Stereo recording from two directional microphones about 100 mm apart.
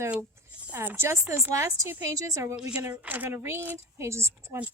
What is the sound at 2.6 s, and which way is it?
A woman's voice, 10° right (ahead or behind).